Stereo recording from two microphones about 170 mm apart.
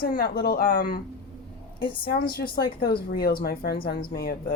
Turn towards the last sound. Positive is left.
turn(degrees=70)  # may be behind; listen again after turning